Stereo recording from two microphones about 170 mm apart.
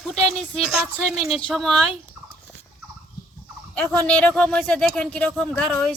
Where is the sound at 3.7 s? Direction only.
5° left (ahead or behind).